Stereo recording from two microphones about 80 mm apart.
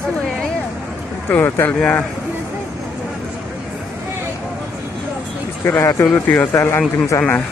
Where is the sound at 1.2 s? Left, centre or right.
Left.